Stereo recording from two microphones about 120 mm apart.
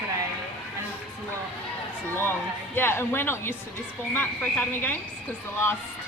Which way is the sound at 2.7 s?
20° left (ahead or behind).